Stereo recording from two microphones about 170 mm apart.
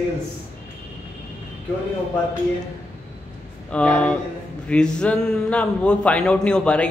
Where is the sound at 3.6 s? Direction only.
5° left (ahead or behind).